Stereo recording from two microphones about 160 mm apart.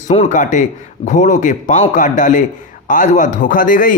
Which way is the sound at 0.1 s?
45° left (ahead or behind).